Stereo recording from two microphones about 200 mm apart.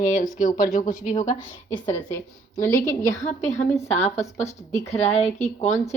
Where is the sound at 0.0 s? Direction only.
40° left (ahead or behind).